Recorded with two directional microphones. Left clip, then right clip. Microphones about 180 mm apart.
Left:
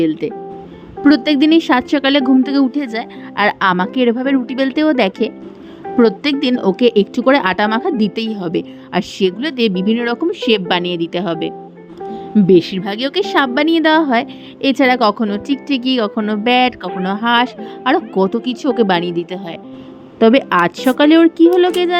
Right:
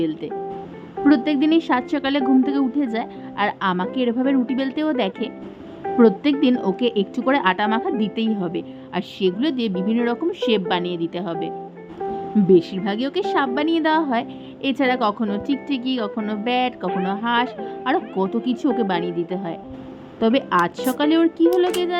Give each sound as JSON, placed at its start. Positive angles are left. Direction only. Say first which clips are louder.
{"t": 0.0, "sound": "a woman's voice", "louder": "left 7 dB", "side_deg": 30}